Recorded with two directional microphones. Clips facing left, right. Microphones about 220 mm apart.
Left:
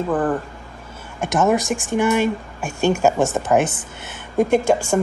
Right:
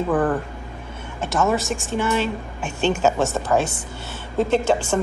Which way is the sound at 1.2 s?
15° left (ahead or behind).